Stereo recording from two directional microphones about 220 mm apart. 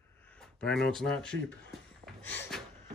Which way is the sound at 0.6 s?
5° left (ahead or behind).